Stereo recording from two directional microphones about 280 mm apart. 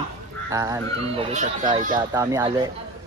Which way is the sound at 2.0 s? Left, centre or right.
Centre.